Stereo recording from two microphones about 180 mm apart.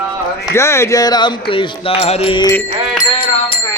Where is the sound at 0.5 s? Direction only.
15° left (ahead or behind); by 2.4 s 30° left (ahead or behind).